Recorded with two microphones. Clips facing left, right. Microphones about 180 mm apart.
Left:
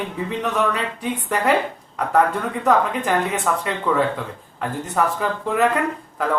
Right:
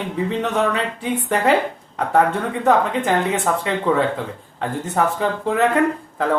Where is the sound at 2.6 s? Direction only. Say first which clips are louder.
Right 2 dB; 25° right (ahead or behind).